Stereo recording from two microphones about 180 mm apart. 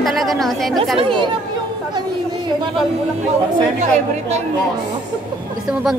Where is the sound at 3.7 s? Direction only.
40° right (ahead or behind).